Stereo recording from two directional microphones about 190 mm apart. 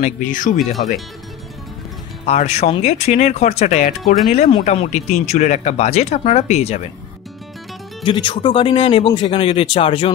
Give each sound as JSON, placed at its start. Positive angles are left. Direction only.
{"t": 0.0, "sound": "speech", "side_deg": 45}
{"t": 2.2, "sound": "speech", "side_deg": 35}
{"t": 8.0, "sound": "speech", "side_deg": 25}